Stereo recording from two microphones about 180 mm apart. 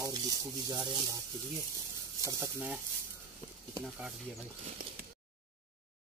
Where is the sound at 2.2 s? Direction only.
20° right (ahead or behind).